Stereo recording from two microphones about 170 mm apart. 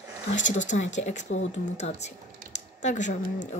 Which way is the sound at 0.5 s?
45° left (ahead or behind).